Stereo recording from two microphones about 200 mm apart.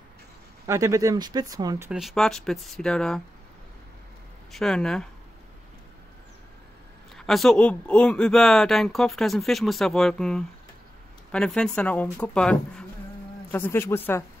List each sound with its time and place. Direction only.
0.7 s speech: 15° right (ahead or behind)
1.9 s speech: centre (ahead or behind)
4.5 s speech: centre (ahead or behind)
7.2 s speech: centre (ahead or behind)